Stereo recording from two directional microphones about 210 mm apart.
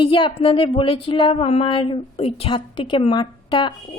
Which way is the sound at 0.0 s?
25° left (ahead or behind).